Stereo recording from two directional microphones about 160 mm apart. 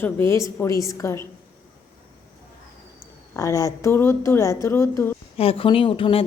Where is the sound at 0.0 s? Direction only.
15° left (ahead or behind).